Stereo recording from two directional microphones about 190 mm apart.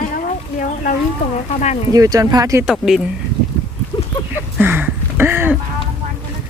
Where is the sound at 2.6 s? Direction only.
5° right (ahead or behind).